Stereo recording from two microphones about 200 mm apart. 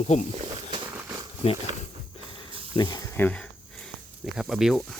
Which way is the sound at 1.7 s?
25° right (ahead or behind).